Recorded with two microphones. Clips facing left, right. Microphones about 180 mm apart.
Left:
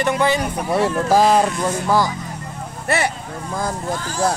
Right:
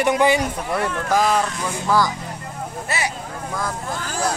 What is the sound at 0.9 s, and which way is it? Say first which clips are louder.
Speech: left 4 dB; 35° left (ahead or behind).